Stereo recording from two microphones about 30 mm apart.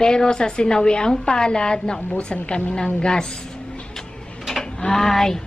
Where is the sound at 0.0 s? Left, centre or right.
Left.